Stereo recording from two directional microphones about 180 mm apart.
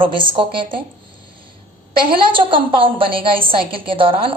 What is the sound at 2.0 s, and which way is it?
A woman's voice, 30° right (ahead or behind).